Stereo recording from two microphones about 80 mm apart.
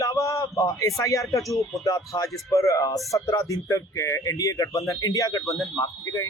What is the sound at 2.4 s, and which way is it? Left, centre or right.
Speech, left.